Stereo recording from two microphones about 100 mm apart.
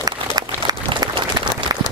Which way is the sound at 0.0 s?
40° right (ahead or behind).